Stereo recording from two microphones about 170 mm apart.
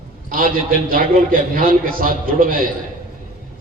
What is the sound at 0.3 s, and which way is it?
A man's voice, 55° right (ahead or behind).